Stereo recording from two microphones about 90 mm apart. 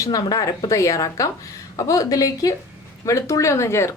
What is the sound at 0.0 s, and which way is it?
Speech, 40° left (ahead or behind).